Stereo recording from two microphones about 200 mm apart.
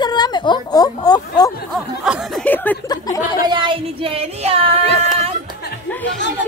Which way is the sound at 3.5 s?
25° right (ahead or behind).